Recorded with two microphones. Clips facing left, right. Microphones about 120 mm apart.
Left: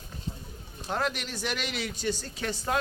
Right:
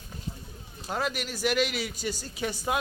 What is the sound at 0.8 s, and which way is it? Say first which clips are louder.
A man's voice: even; 5° right (ahead or behind).